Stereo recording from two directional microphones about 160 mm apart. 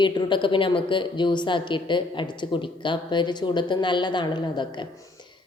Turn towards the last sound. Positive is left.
turn(degrees=30)  # may be behind; listen again after turning